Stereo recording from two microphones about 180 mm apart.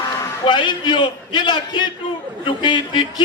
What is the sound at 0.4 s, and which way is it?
A man's voice, 25° left (ahead or behind).